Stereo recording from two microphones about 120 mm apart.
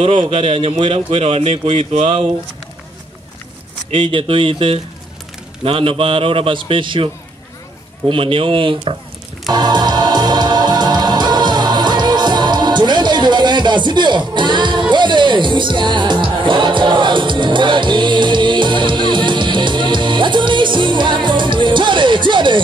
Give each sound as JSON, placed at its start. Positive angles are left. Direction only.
{"t": 0.0, "sound": "speech", "side_deg": -50}
{"t": 3.9, "sound": "speech", "side_deg": -45}
{"t": 8.1, "sound": "speech", "side_deg": -50}
{"t": 9.5, "sound": "music", "side_deg": -35}